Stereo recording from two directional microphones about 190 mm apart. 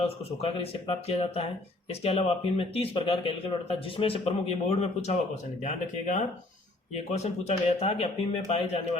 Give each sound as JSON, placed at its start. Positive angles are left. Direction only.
{"t": 0.0, "sound": "speech", "side_deg": 30}